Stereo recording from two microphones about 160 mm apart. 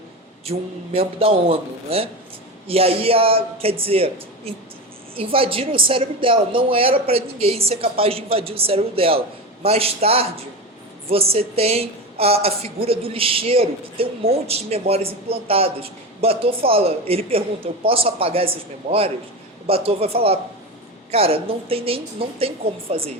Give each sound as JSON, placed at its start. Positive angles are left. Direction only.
{"t": 0.5, "sound": "a woman's voice", "side_deg": -40}